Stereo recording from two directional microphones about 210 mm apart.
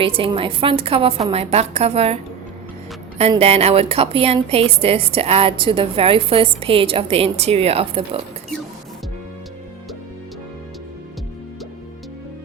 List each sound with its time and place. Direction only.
0.0 s a woman's voice: 25° right (ahead or behind)
3.2 s a woman's voice: 30° right (ahead or behind)